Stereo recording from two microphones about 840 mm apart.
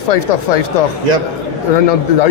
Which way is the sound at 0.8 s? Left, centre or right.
Left.